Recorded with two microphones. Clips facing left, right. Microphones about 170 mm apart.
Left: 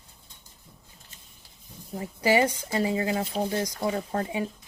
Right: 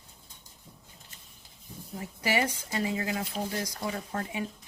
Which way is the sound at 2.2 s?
25° left (ahead or behind).